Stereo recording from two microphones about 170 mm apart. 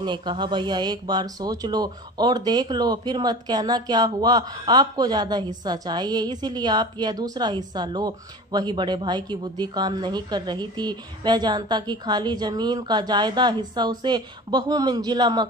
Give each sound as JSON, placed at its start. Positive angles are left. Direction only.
{"t": 0.0, "sound": "a woman's voice", "side_deg": -25}